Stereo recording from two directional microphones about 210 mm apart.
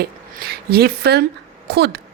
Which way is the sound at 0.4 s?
50° right (ahead or behind).